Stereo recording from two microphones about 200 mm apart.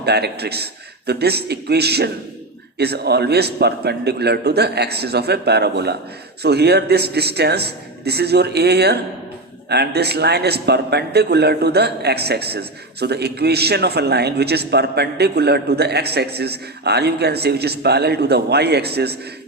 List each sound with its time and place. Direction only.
0.0 s a man's voice: 55° right (ahead or behind)